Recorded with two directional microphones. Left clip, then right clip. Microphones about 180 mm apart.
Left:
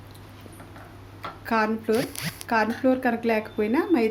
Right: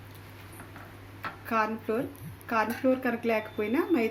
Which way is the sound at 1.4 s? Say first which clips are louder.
Left 5 dB; 40° left (ahead or behind).